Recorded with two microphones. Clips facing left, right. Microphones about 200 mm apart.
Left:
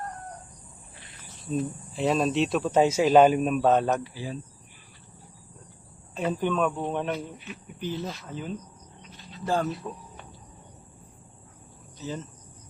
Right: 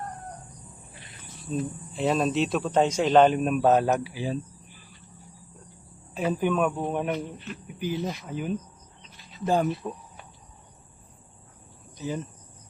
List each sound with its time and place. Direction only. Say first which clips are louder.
1.5 s a man's voice: left 1 dB; centre (ahead or behind)
6.1 s speech: right 1 dB; 10° right (ahead or behind)
7.3 s speech: right 3 dB; 10° left (ahead or behind)
7.8 s speech: right 3 dB; 15° right (ahead or behind)
11.9 s speech: right 3 dB; 15° right (ahead or behind)